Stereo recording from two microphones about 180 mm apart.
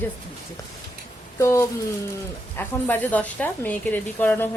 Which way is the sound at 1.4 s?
15° left (ahead or behind).